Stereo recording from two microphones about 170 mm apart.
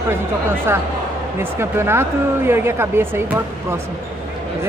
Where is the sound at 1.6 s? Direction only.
15° right (ahead or behind).